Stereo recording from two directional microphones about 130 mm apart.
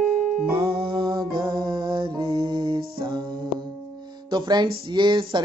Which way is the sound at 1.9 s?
35° right (ahead or behind).